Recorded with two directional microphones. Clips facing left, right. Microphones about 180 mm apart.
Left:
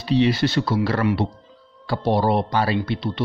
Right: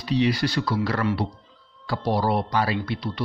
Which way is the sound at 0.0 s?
25° left (ahead or behind).